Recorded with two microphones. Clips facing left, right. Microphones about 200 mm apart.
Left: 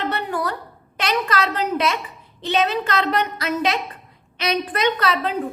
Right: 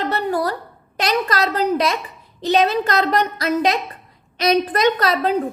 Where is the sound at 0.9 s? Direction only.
40° right (ahead or behind).